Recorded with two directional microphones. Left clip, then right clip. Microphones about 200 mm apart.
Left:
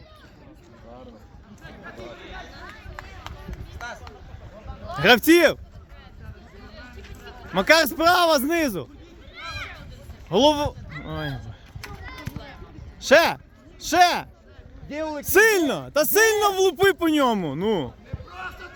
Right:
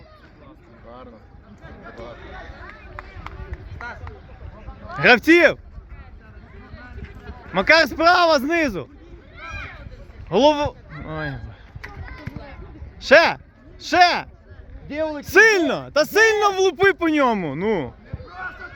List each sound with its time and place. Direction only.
2.6 s music: 75° left (ahead or behind)
4.9 s speech: 20° left (ahead or behind)
6.6 s a sound: 70° left (ahead or behind)
7.5 s a man's voice: 15° left (ahead or behind)
9.3 s a sound: 5° right (ahead or behind)
10.2 s a man's voice: 15° left (ahead or behind)
11.8 s a sound: 65° left (ahead or behind)
13.0 s speech: 20° left (ahead or behind)
14.8 s a man's voice: 35° right (ahead or behind)
15.2 s speech: 20° left (ahead or behind)
18.3 s basketball bounce: 35° left (ahead or behind)